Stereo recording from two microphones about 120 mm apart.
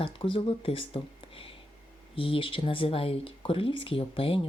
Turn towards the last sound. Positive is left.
turn(degrees=50)  # may be behind; listen again after turning